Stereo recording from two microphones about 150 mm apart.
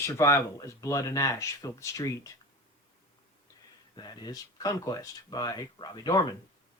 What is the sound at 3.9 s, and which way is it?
Speech, 25° left (ahead or behind).